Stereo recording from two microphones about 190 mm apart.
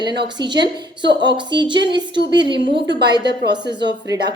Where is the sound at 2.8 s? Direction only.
65° right (ahead or behind).